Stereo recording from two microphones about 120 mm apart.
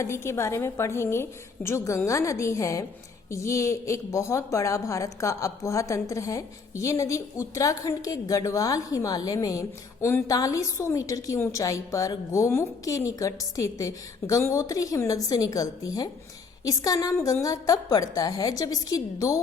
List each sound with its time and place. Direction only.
0.0 s a woman's voice: 20° left (ahead or behind)